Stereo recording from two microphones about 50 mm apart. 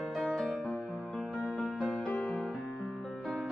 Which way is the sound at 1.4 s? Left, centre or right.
Right.